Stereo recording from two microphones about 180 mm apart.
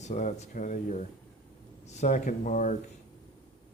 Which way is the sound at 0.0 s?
40° left (ahead or behind).